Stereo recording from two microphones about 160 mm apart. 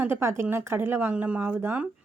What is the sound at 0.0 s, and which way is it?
Speech, 15° right (ahead or behind).